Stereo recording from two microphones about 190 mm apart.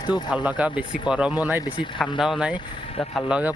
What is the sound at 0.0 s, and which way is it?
Speech, 20° left (ahead or behind).